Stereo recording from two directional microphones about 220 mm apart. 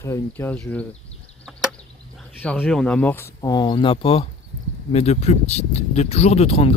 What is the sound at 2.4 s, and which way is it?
Speech, 5° left (ahead or behind).